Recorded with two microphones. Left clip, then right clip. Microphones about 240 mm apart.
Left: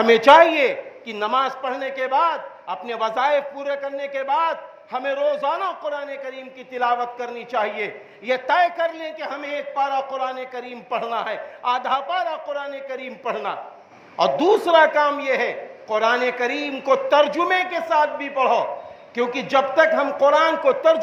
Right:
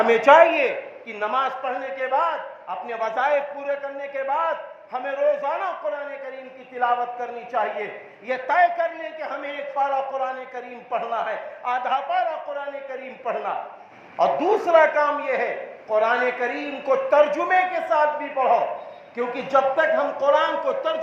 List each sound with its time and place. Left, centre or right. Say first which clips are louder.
0.0 s a man's voice: left 2 dB; left
14.3 s a woman's voice: left 3 dB; left
14.7 s a man's voice: right 1 dB; left